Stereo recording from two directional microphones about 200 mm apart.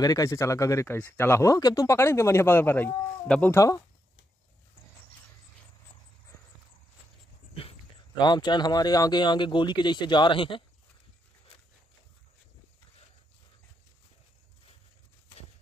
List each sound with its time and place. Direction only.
0.0 s speech: 15° left (ahead or behind)
7.6 s dog: 30° left (ahead or behind)
8.2 s speech: 20° left (ahead or behind)